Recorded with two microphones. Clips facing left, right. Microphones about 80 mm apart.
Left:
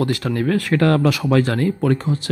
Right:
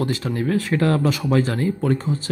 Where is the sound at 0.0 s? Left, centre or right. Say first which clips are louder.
Left 3 dB; left.